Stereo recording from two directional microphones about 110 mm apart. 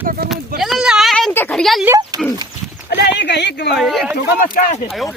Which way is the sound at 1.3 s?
20° left (ahead or behind).